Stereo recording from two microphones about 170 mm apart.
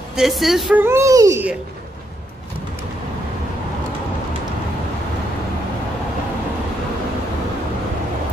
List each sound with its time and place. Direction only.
0.1 s speech: centre (ahead or behind)
0.8 s a child's voice: 15° right (ahead or behind)